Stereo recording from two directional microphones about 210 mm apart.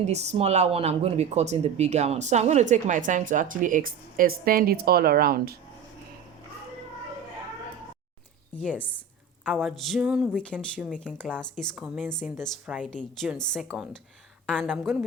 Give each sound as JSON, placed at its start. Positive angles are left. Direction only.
{"t": 0.1, "sound": "speech", "side_deg": -30}
{"t": 9.4, "sound": "speech", "side_deg": 0}